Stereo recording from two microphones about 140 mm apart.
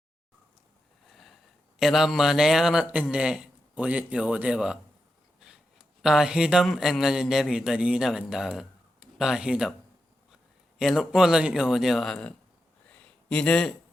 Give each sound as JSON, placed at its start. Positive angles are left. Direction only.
{"t": 1.8, "sound": "a man's voice", "side_deg": 0}
{"t": 6.0, "sound": "a man's voice", "side_deg": -5}
{"t": 10.8, "sound": "a man's voice", "side_deg": -5}
{"t": 12.9, "sound": "a sound", "side_deg": 10}